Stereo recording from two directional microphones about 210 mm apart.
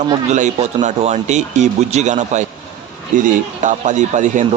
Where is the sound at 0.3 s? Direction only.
35° right (ahead or behind).